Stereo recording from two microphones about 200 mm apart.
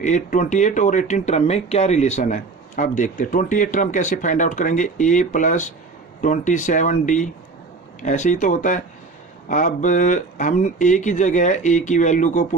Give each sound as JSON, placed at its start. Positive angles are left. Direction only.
{"t": 0.0, "sound": "speech", "side_deg": 40}